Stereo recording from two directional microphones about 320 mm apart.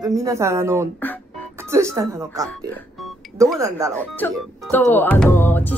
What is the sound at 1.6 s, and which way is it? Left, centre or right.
Speech, centre.